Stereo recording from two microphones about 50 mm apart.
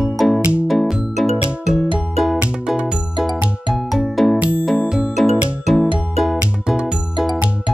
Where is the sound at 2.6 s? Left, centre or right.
Right.